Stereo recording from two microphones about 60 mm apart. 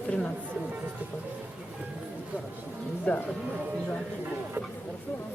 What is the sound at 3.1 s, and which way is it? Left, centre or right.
Speech, left.